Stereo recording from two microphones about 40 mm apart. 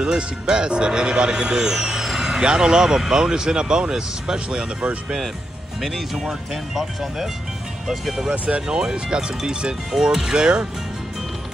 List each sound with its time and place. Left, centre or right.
0.0 s speech: centre
5.8 s speech: centre
8.5 s speech: right